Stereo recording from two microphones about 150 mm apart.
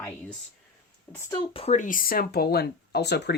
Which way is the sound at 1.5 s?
45° left (ahead or behind).